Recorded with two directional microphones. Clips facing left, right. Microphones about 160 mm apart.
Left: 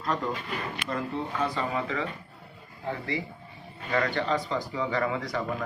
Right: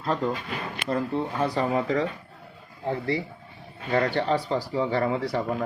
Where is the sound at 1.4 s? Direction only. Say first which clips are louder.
Right 4 dB; 35° right (ahead or behind).